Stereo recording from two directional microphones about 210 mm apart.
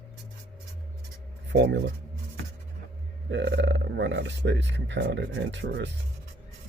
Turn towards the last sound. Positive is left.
turn(degrees=-55)  # may be behind; listen again after turning